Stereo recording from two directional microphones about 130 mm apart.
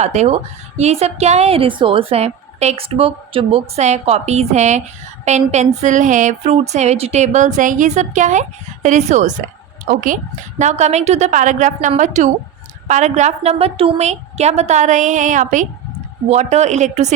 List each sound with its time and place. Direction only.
0.0 s a woman's voice: 55° right (ahead or behind)
9.9 s speech: 90° right
10.6 s a woman's voice: 65° right (ahead or behind)
16.3 s a woman's voice: 60° right (ahead or behind)